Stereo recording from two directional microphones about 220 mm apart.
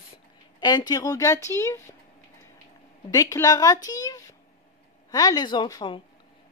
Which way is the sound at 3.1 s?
15° left (ahead or behind).